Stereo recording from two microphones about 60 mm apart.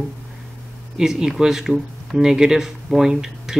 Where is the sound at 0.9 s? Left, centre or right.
Centre.